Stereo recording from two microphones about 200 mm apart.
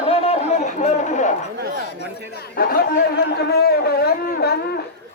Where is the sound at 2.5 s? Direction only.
50° left (ahead or behind).